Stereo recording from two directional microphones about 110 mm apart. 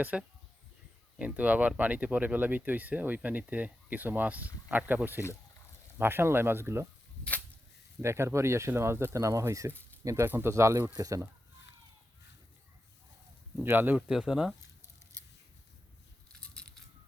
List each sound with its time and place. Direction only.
0.0 s speech: 15° right (ahead or behind)
6.0 s speech: 20° right (ahead or behind)
8.0 s speech: 25° right (ahead or behind)
13.6 s speech: 20° right (ahead or behind)
14.1 s speech: 5° right (ahead or behind)
16.3 s a sound: 10° left (ahead or behind)